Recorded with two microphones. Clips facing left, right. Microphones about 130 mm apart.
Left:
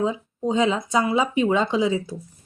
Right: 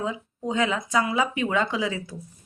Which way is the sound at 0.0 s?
25° left (ahead or behind).